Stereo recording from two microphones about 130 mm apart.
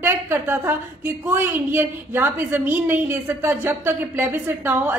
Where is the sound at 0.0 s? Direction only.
15° right (ahead or behind).